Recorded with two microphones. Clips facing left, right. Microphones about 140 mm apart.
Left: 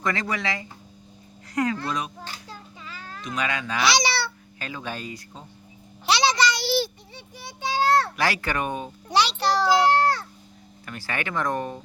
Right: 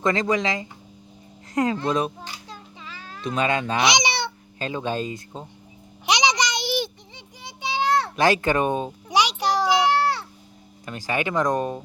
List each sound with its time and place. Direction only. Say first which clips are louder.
0.0 s speech: right 5 dB; 20° right (ahead or behind)
3.2 s speech: right 6 dB; 25° right (ahead or behind)
6.1 s a sound: left 1 dB; 15° right (ahead or behind)
7.9 s speech: right 3 dB; 20° right (ahead or behind)
9.0 s child singing: even; 15° right (ahead or behind)
10.8 s speech: right 5 dB; 15° right (ahead or behind)